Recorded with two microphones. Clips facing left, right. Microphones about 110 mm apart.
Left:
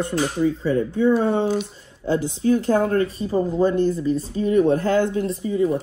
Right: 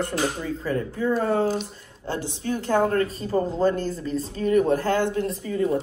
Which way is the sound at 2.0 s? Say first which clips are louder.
Left 8 dB; 40° right (ahead or behind).